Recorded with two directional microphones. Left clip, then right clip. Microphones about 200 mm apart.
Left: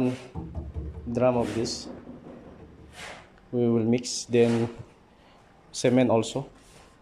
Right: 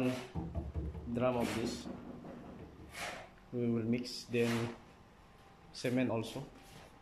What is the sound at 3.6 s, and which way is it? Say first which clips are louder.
Speech: left 12 dB; 40° left (ahead or behind).